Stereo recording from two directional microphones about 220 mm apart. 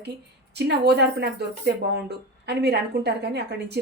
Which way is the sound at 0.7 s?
50° right (ahead or behind).